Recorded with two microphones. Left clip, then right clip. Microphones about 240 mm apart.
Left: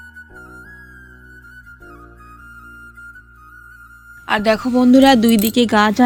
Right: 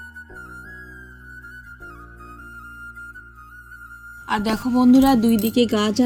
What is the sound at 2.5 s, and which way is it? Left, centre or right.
Music, centre.